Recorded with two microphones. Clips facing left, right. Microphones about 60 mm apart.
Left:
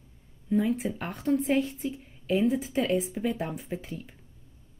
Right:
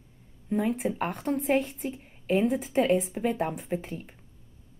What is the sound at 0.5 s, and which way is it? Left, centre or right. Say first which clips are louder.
Speech: left 1 dB; right.